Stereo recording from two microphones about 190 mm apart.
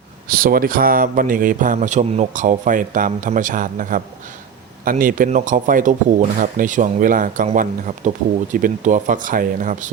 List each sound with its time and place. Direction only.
0.3 s a man's voice: 50° right (ahead or behind)